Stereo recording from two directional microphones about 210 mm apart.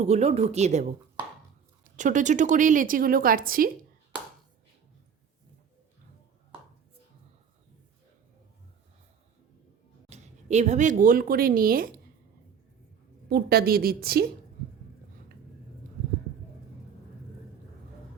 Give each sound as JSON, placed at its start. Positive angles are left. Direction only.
{"t": 0.0, "sound": "a woman's voice", "side_deg": -30}
{"t": 10.1, "sound": "speech", "side_deg": -35}
{"t": 13.3, "sound": "a woman's voice", "side_deg": -45}